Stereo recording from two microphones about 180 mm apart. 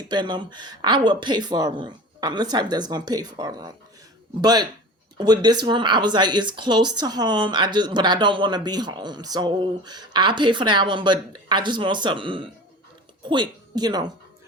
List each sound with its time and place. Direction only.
0.1 s speech: 25° right (ahead or behind)